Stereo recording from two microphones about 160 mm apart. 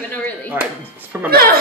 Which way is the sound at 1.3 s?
70° right (ahead or behind).